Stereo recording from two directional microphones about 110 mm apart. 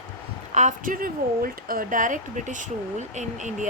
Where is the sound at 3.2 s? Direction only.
90° right.